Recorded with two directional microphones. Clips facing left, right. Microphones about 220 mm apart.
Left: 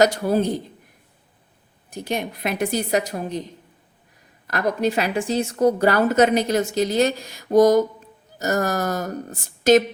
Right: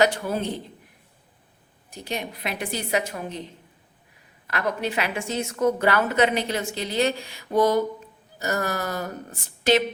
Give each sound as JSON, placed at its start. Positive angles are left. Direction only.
{"t": 0.0, "sound": "a woman's voice", "side_deg": 40}
{"t": 1.9, "sound": "a woman's voice", "side_deg": 50}
{"t": 4.4, "sound": "a woman's voice", "side_deg": 40}